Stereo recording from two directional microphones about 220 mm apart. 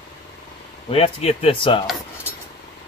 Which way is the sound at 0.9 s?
25° left (ahead or behind).